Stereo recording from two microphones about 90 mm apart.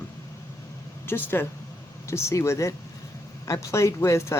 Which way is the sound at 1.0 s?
25° left (ahead or behind).